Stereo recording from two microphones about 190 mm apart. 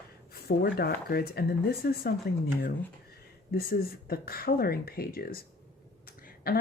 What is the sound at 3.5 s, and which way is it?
Speech, 55° left (ahead or behind).